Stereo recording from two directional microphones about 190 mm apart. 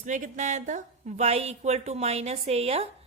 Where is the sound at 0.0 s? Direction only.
40° right (ahead or behind).